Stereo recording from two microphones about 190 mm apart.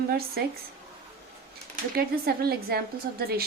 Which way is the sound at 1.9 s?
55° right (ahead or behind).